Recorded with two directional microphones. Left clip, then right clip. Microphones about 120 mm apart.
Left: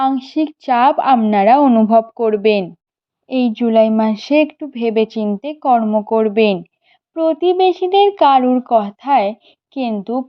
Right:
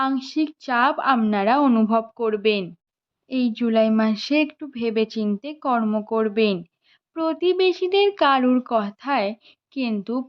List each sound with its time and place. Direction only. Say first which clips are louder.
0.0 s a woman's voice: left 6 dB; 20° left (ahead or behind)
7.2 s speech: left 7 dB; 15° left (ahead or behind)